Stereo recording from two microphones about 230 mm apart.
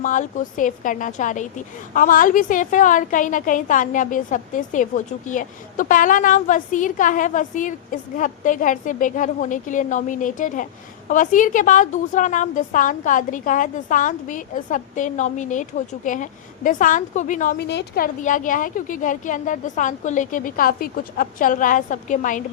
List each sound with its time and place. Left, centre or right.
0.0 s a woman's voice: left